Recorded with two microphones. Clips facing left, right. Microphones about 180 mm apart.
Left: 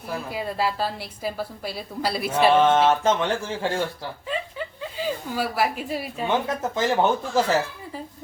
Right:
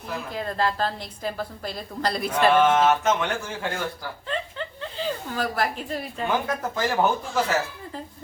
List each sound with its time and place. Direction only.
0.3 s a woman's voice: 10° left (ahead or behind)
2.5 s speech: 30° left (ahead or behind)
4.3 s a sound: 10° left (ahead or behind)
6.2 s speech: 25° left (ahead or behind)